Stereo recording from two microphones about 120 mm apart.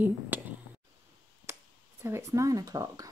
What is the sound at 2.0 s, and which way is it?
Speech, 25° right (ahead or behind).